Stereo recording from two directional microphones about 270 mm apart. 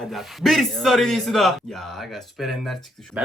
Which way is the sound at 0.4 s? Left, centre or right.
Centre.